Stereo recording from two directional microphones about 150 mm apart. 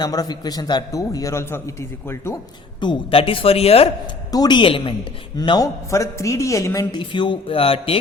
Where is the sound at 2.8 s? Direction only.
35° left (ahead or behind).